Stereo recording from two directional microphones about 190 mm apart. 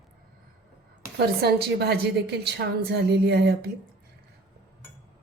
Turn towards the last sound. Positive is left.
turn(degrees=-60)  # may be behind; listen again after turning